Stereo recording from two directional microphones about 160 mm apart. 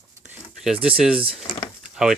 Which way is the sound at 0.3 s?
5° right (ahead or behind).